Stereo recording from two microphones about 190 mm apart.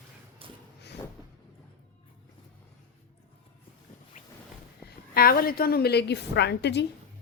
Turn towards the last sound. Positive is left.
turn(degrees=65)  # may be behind; listen again after turning